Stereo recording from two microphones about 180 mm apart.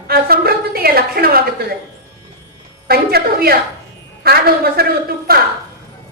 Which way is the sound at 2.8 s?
60° right (ahead or behind).